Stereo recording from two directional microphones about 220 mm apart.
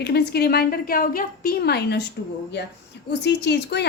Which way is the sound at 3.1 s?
50° left (ahead or behind).